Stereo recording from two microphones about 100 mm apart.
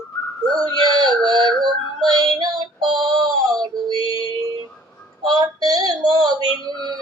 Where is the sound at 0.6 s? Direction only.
45° right (ahead or behind).